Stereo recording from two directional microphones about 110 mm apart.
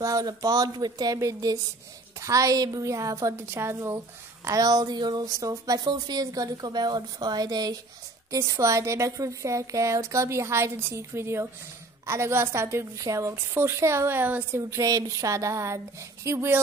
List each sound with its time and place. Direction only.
0.0 s a woman's voice: 30° right (ahead or behind)
4.5 s a woman's voice: 35° right (ahead or behind)